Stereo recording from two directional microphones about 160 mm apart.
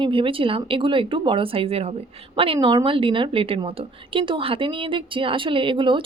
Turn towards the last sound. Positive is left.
turn(degrees=-30)  # may be behind; listen again after turning